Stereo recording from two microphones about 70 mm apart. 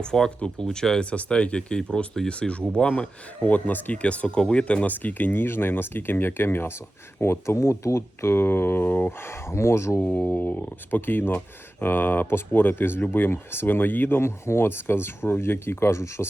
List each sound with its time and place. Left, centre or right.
0.0 s speech: centre; by 10.0 s left
10.0 s speech: left